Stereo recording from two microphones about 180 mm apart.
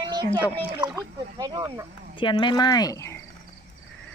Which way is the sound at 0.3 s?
10° left (ahead or behind).